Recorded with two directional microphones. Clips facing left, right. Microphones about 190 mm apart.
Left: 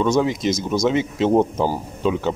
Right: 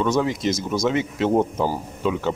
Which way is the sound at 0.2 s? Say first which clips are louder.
Left 2 dB; 20° left (ahead or behind).